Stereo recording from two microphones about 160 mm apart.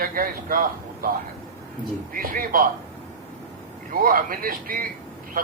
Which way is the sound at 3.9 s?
60° right (ahead or behind).